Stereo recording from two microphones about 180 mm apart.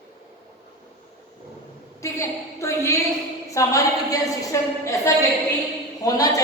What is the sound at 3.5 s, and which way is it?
A woman's voice, 20° left (ahead or behind).